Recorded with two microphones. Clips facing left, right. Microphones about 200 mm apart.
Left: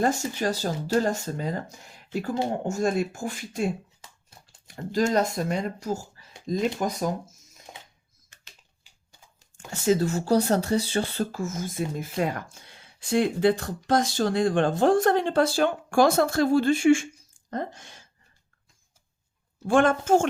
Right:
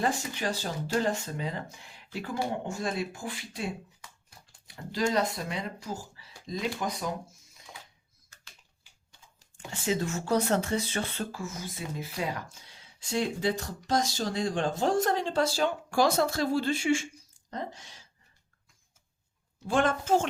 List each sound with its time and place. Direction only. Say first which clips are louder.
0.0 s speech: left 5 dB; 45° left (ahead or behind)
4.7 s speech: left 5 dB; 45° left (ahead or behind)
9.6 s speech: left 7 dB; 40° left (ahead or behind)
19.6 s speech: left 6 dB; 50° left (ahead or behind)